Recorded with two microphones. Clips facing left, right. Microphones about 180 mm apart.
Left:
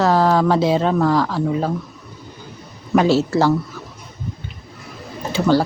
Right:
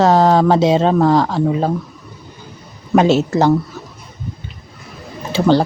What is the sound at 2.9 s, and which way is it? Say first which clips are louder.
Speech: right 2 dB; 20° right (ahead or behind).